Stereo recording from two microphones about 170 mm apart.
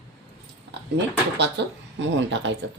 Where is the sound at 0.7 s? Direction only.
80° right.